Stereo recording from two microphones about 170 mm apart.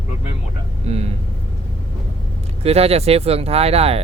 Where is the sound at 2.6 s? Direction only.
35° right (ahead or behind).